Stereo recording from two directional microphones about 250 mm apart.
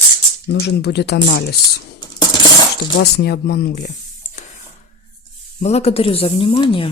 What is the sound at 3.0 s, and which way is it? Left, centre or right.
Speech, left.